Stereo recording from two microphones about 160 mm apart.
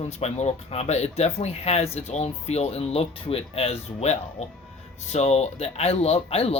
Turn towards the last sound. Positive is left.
turn(degrees=40)  # may be behind; listen again after turning